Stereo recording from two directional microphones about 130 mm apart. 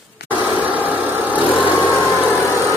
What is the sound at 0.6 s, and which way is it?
Vehicle, 10° right (ahead or behind).